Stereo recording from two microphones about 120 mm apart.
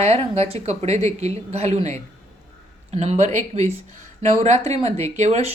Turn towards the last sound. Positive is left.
turn(degrees=-65)  # may be behind; listen again after turning